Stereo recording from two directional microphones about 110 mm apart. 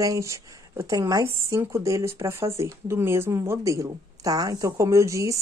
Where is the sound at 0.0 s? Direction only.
30° right (ahead or behind).